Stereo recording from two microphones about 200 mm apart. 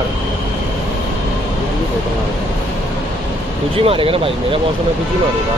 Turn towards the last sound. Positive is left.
turn(degrees=-25)  # may be behind; listen again after turning